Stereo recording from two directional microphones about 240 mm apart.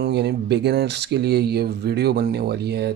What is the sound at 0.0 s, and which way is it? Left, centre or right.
Speech, right.